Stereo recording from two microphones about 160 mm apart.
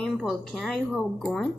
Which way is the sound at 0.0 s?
5° left (ahead or behind).